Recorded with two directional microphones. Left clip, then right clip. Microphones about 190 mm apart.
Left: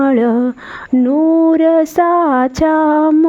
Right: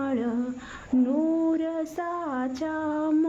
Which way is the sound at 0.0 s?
50° left (ahead or behind).